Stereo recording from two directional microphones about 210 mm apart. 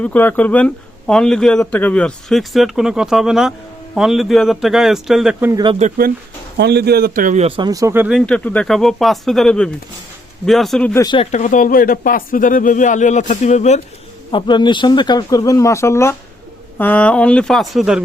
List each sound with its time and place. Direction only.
0.0 s speech: 10° left (ahead or behind); by 5.7 s 15° right (ahead or behind)
6.6 s speech: 50° right (ahead or behind); by 8.2 s 10° right (ahead or behind)
8.3 s speech: 5° left (ahead or behind)
11.0 s speech: 20° left (ahead or behind)
11.3 s speech: 35° left (ahead or behind)
14.3 s speech: 20° left (ahead or behind); by 18.0 s centre (ahead or behind)